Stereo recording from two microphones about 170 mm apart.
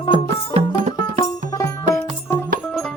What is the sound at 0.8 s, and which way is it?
Music, 40° right (ahead or behind).